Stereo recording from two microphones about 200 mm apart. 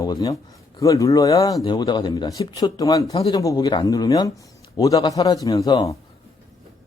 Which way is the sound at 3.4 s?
20° left (ahead or behind).